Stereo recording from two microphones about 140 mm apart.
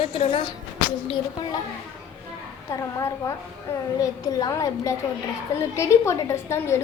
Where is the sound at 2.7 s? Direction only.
20° left (ahead or behind).